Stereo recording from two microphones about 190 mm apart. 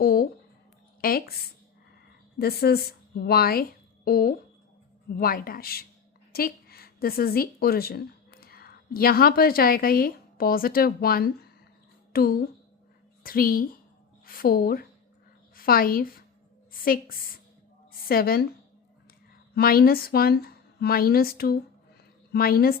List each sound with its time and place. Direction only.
0.0 s a sound: 50° left (ahead or behind)
1.0 s a woman's voice: 50° left (ahead or behind)
2.4 s a woman's voice: 55° left (ahead or behind)
19.5 s a woman's voice: 55° left (ahead or behind)